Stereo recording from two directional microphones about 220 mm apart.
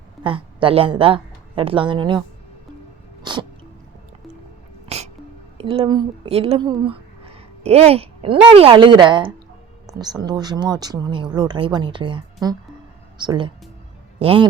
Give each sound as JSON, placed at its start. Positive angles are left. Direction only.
{"t": 0.2, "sound": "a woman's voice", "side_deg": -25}
{"t": 3.3, "sound": "sneeze", "side_deg": -20}
{"t": 4.9, "sound": "sneeze", "side_deg": -30}
{"t": 5.5, "sound": "a man's voice", "side_deg": -25}